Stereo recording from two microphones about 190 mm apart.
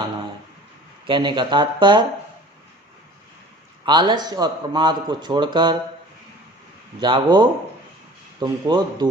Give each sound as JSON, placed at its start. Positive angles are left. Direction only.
{"t": 1.0, "sound": "a man's voice", "side_deg": -25}
{"t": 3.8, "sound": "a man's voice", "side_deg": -25}
{"t": 7.0, "sound": "a man's voice", "side_deg": -25}